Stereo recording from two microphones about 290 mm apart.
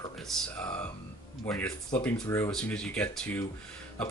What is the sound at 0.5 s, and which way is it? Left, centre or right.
Speech, centre.